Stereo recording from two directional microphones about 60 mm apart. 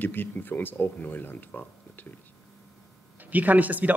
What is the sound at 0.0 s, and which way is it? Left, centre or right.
Speech, left.